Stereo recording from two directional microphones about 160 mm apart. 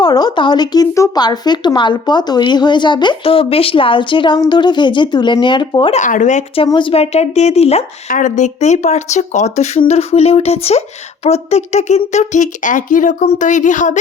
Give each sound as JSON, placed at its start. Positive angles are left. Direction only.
{"t": 0.0, "sound": "speech", "side_deg": 25}
{"t": 5.9, "sound": "speech", "side_deg": 50}
{"t": 6.7, "sound": "speech", "side_deg": 30}